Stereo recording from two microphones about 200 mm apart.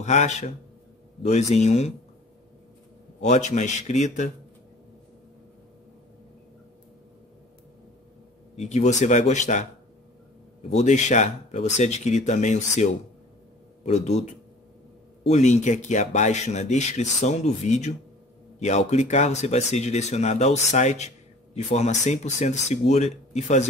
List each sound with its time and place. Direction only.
0.0 s speech: 35° left (ahead or behind)
3.2 s speech: 35° left (ahead or behind)
8.5 s speech: 35° left (ahead or behind)
10.7 s speech: 35° left (ahead or behind)